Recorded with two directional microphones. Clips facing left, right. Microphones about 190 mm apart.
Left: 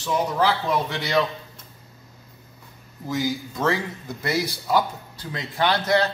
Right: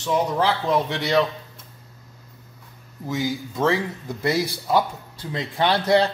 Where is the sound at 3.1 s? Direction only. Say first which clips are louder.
Even; 25° right (ahead or behind).